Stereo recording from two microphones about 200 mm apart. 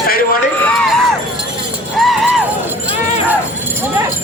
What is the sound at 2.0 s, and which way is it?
Music, centre (ahead or behind).